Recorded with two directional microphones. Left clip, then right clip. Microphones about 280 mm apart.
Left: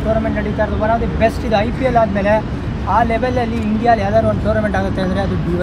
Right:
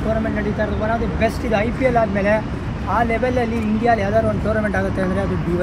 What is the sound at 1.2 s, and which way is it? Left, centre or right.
Speech, centre.